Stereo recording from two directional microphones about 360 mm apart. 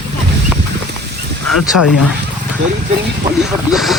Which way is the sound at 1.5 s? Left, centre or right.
Left.